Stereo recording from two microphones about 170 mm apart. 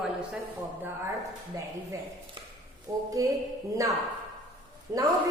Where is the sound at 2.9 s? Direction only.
20° right (ahead or behind).